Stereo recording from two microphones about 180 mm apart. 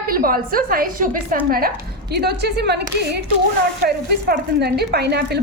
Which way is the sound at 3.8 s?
65° right (ahead or behind).